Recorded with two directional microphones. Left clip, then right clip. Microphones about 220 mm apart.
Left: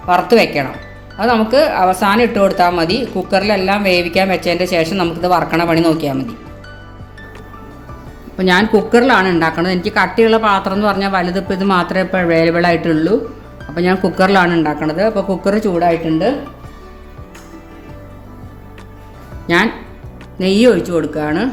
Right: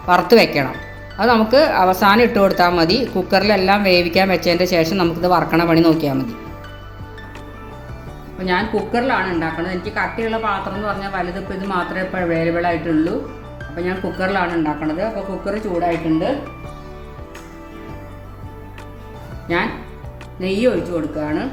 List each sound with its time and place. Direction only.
0.0 s speech: centre (ahead or behind)
8.4 s a woman's voice: 50° left (ahead or behind)
20.4 s a woman's voice: 50° left (ahead or behind)